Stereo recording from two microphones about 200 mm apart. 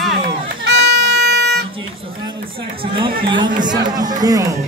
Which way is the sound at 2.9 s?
25° right (ahead or behind).